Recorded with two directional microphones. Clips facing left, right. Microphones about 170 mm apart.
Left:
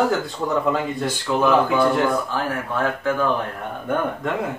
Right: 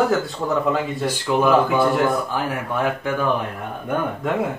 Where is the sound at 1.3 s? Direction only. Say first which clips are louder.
Right 1 dB; 10° right (ahead or behind).